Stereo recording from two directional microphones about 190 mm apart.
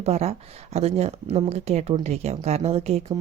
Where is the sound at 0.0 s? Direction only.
35° right (ahead or behind).